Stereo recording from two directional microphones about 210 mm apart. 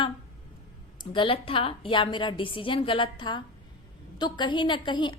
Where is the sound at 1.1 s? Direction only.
25° left (ahead or behind).